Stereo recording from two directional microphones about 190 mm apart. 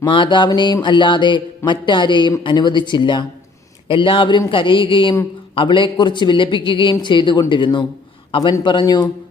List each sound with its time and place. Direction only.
0.0 s mantra: 25° left (ahead or behind)